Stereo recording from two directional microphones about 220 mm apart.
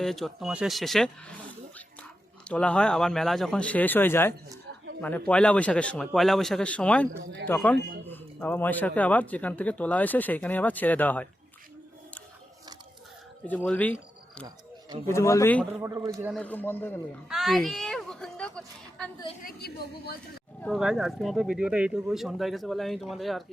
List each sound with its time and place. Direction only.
0.0 s speech: centre (ahead or behind)
2.5 s a man's voice: 5° left (ahead or behind)
13.4 s a man's voice: 5° left (ahead or behind)
14.4 s a sound: 20° right (ahead or behind)
15.1 s a man's voice: 15° left (ahead or behind)
15.8 s a man's voice: 15° right (ahead or behind)
16.3 s a man's voice: 5° left (ahead or behind)
17.2 s a sound: centre (ahead or behind)
19.5 s a woman's voice: 45° left (ahead or behind)
20.6 s speech: centre (ahead or behind)